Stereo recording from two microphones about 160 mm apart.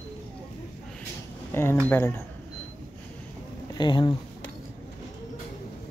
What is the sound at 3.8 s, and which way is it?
Speech, 30° left (ahead or behind).